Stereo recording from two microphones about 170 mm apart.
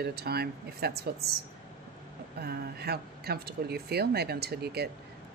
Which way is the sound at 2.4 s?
70° right (ahead or behind).